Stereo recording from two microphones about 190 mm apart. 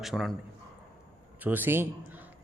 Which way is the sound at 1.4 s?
10° right (ahead or behind).